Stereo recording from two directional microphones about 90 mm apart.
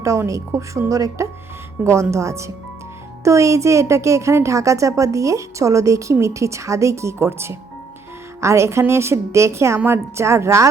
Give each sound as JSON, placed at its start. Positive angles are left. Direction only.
{"t": 0.0, "sound": "a woman's voice", "side_deg": -35}